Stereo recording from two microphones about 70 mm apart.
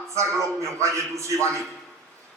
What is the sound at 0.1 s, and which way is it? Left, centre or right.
A man's voice, right.